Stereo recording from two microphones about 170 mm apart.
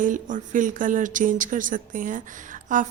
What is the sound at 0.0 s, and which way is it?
Speech, 50° right (ahead or behind).